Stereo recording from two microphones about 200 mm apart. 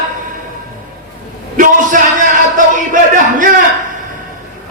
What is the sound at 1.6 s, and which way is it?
A man's voice, 45° right (ahead or behind).